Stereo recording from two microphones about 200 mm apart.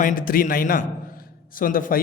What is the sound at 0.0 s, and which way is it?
A man's voice, 45° left (ahead or behind).